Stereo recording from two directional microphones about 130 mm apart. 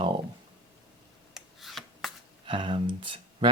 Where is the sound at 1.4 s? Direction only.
Centre (ahead or behind).